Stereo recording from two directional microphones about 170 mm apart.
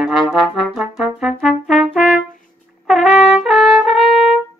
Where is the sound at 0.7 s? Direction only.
5° right (ahead or behind).